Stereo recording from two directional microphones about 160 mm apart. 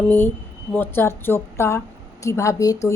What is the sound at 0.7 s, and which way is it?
A woman's voice, 10° left (ahead or behind).